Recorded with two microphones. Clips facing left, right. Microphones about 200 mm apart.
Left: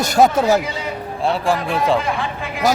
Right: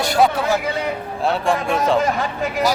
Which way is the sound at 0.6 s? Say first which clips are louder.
Right 4 dB; 60° right (ahead or behind).